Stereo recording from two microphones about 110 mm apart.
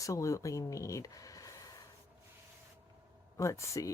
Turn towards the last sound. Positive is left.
turn(degrees=30)  # may be behind; listen again after turning